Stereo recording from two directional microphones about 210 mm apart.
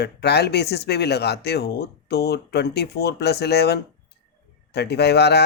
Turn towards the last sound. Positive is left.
turn(degrees=50)  # may be behind; listen again after turning